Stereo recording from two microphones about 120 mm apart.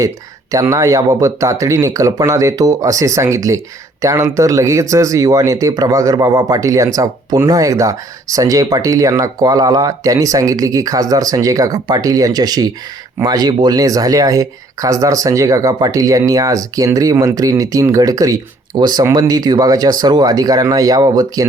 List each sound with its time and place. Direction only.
0.5 s speech: 25° right (ahead or behind)